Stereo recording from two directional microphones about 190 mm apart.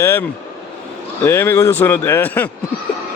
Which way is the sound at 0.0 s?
15° left (ahead or behind).